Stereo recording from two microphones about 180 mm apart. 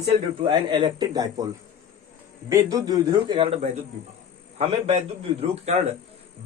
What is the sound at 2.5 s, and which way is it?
A man's voice, 20° right (ahead or behind).